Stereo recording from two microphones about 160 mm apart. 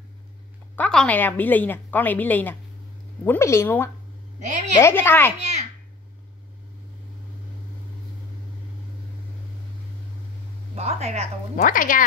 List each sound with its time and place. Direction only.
0.7 s a woman's voice: 5° left (ahead or behind)
5.4 s a child's voice: 45° right (ahead or behind)
10.7 s speech: 45° right (ahead or behind)
11.5 s speech: 55° left (ahead or behind)